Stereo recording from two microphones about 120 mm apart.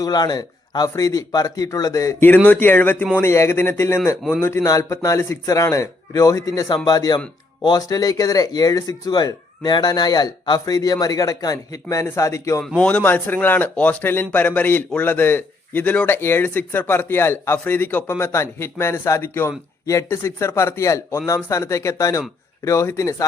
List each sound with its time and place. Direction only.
0.0 s speech: 35° left (ahead or behind)
2.5 s a man's voice: 15° left (ahead or behind)
12.6 s a man's voice: 10° left (ahead or behind); by 23.2 s 25° left (ahead or behind)